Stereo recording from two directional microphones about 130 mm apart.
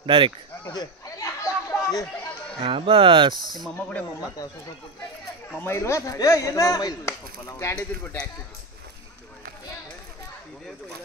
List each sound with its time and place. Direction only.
0.0 s speech: 40° right (ahead or behind)
0.7 s chatter: 25° left (ahead or behind)
2.6 s speech: 45° right (ahead or behind)
5.5 s speech: 15° left (ahead or behind)